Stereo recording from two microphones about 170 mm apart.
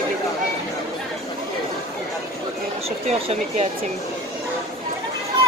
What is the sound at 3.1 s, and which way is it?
Speech, 35° right (ahead or behind).